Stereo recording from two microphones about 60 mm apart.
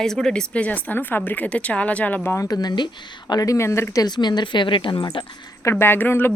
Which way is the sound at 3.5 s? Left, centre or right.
Left.